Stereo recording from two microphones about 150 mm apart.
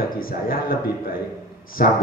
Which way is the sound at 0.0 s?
75° left (ahead or behind).